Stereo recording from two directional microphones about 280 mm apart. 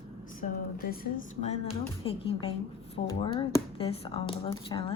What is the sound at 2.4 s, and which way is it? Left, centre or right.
Speech, centre.